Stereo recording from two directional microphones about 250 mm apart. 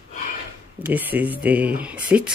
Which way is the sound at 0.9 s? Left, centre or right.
Centre.